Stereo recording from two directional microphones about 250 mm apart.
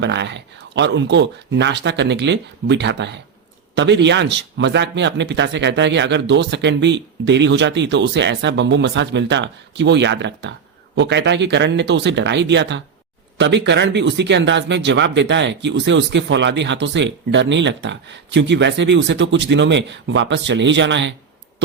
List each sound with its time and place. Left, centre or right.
0.0 s speech: right